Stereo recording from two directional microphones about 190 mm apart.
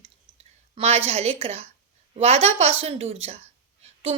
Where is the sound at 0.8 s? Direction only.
35° right (ahead or behind).